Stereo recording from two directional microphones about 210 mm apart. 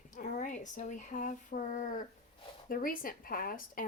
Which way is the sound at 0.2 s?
35° left (ahead or behind).